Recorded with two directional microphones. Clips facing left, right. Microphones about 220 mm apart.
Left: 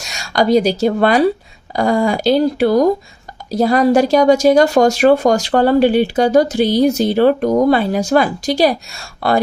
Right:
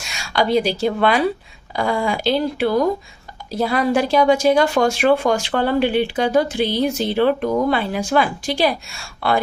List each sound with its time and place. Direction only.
0.0 s a woman's voice: 40° left (ahead or behind)